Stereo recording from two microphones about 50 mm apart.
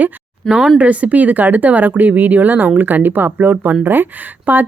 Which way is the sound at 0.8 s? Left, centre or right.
Right.